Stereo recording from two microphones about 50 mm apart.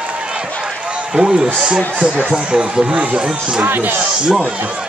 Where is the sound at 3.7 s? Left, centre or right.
Right.